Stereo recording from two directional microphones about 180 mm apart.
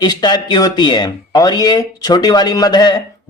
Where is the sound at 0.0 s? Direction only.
20° left (ahead or behind).